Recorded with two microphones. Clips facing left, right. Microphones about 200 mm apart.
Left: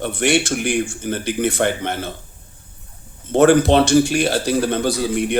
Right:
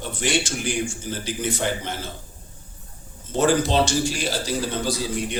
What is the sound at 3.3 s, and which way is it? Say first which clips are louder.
Speech: left 8 dB; 60° left (ahead or behind).